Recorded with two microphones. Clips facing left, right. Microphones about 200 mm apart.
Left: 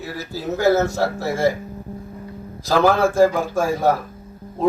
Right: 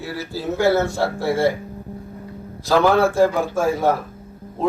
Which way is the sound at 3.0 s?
45° left (ahead or behind).